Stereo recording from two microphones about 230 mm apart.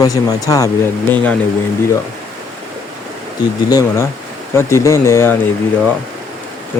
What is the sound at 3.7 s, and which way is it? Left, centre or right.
Speech, centre.